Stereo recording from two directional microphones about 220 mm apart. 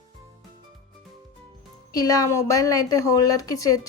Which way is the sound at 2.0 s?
15° left (ahead or behind).